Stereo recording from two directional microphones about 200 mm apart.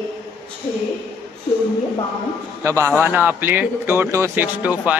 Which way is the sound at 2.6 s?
15° right (ahead or behind).